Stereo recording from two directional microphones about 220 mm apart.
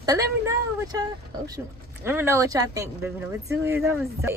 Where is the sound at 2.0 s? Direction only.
10° right (ahead or behind).